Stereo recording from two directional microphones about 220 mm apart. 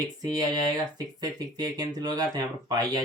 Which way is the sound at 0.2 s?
15° right (ahead or behind).